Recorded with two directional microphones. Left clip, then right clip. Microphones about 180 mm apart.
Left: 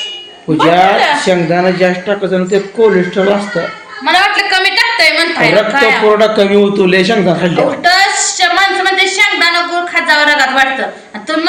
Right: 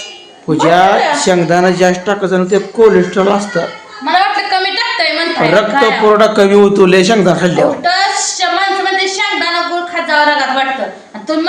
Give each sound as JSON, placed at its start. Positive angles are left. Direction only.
{"t": 0.5, "sound": "a woman's voice", "side_deg": -5}
{"t": 7.5, "sound": "a woman's voice", "side_deg": 0}
{"t": 8.4, "sound": "female singing", "side_deg": -10}
{"t": 9.9, "sound": "a sound", "side_deg": -5}